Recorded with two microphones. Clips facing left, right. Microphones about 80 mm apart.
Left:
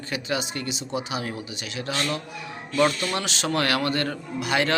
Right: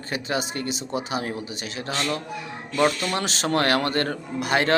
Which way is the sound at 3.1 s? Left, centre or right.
Right.